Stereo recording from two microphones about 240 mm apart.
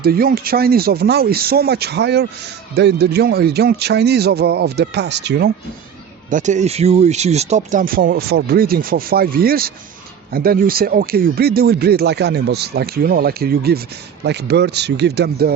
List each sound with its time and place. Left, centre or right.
0.0 s a man's voice: right
6.3 s a man's voice: right